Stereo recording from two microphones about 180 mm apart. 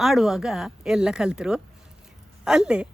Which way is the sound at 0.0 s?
Centre (ahead or behind).